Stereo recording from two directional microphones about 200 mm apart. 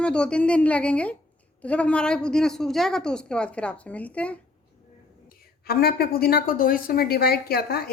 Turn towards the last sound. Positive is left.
turn(degrees=50)  # may be behind; listen again after turning